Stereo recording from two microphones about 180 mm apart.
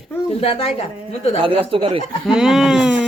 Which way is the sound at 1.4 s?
30° right (ahead or behind).